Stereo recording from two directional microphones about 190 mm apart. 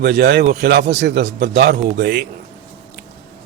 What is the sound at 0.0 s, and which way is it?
A man's voice, 60° right (ahead or behind).